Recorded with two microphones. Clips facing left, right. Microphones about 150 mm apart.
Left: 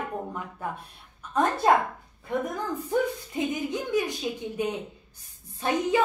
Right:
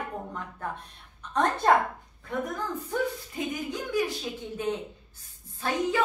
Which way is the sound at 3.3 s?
20° left (ahead or behind).